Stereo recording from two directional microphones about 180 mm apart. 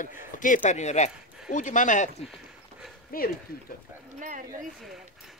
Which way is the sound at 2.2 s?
Centre (ahead or behind).